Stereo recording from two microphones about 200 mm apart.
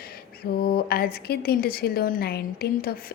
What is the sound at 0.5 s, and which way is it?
A woman's voice, 50° left (ahead or behind).